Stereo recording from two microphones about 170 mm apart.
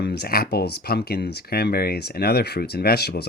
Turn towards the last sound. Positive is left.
turn(degrees=70)  # may be behind; listen again after turning